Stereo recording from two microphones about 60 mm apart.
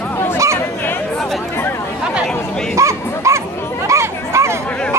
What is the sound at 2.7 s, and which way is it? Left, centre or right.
Chatter, right.